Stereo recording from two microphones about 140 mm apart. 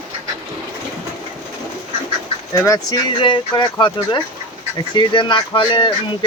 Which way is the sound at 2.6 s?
30° left (ahead or behind).